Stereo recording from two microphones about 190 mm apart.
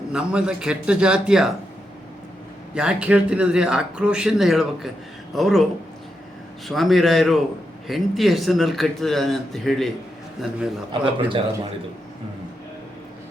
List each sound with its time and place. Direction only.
0.1 s a man's voice: 5° right (ahead or behind)
2.7 s a man's voice: 5° right (ahead or behind)
6.7 s a man's voice: centre (ahead or behind)
11.0 s a man's voice: 25° right (ahead or behind)